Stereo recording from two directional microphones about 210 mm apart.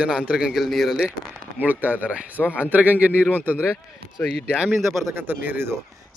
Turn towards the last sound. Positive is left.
turn(degrees=-10)  # may be behind; listen again after turning